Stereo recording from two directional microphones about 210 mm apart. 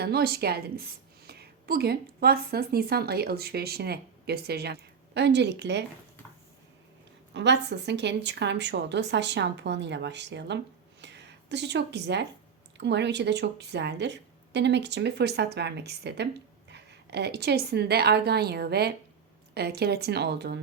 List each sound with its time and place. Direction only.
0.0 s a woman's voice: 50° right (ahead or behind)
7.3 s a woman's voice: 55° right (ahead or behind)